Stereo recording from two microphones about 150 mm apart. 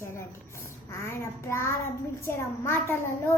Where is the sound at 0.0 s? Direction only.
15° left (ahead or behind).